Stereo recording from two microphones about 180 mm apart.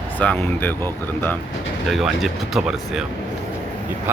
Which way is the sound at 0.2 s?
10° left (ahead or behind).